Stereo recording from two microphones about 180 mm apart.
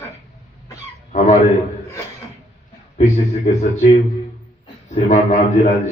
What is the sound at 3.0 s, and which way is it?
Speech, 40° left (ahead or behind).